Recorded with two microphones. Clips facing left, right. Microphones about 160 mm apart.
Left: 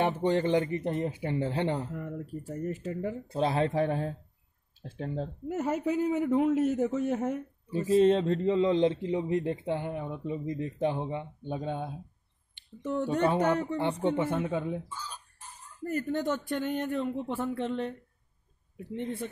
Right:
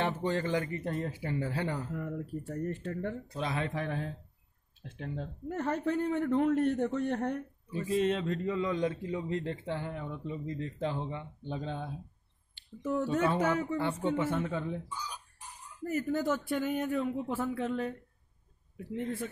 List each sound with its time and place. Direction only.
0.0 s a man's voice: 20° left (ahead or behind)
1.9 s speech: centre (ahead or behind)
3.3 s speech: 30° left (ahead or behind)
5.5 s speech: 10° left (ahead or behind)
7.7 s a man's voice: 30° left (ahead or behind); by 11.9 s 15° left (ahead or behind)
12.6 s a sound: 20° left (ahead or behind)
13.4 s speech: 5° right (ahead or behind)
13.7 s a woman's voice: 20° left (ahead or behind)
14.9 s speech: 15° right (ahead or behind)